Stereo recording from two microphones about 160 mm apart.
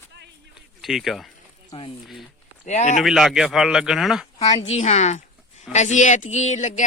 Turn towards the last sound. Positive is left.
turn(degrees=45)  # may be behind; listen again after turning